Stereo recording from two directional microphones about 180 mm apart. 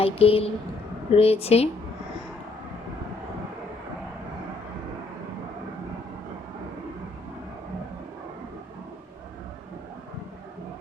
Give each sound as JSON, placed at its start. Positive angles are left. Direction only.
{"t": 0.0, "sound": "a woman's voice", "side_deg": 30}